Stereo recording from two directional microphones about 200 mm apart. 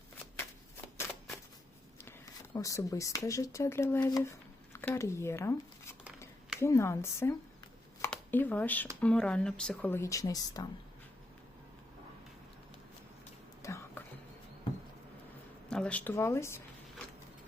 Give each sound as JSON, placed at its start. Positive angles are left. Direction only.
{"t": 2.0, "sound": "speech", "side_deg": 10}
{"t": 13.6, "sound": "a sound", "side_deg": 15}
{"t": 15.7, "sound": "speech", "side_deg": 5}